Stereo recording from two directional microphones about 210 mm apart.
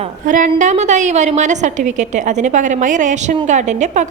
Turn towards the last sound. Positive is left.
turn(degrees=-35)  # may be behind; listen again after turning